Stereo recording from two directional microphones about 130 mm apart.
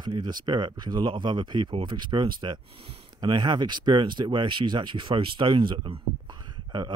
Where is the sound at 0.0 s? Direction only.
35° right (ahead or behind).